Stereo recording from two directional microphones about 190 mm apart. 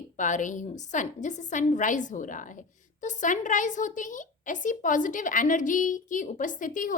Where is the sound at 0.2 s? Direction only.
40° left (ahead or behind).